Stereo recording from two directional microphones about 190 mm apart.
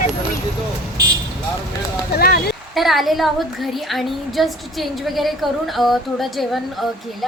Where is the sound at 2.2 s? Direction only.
55° left (ahead or behind).